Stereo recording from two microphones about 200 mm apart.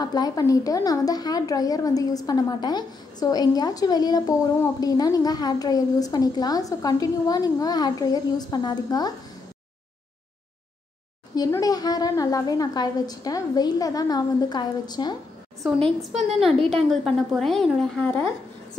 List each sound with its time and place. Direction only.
0.0 s a woman's voice: 20° left (ahead or behind)
11.3 s a woman's voice: 20° left (ahead or behind)
16.3 s a woman's voice: centre (ahead or behind)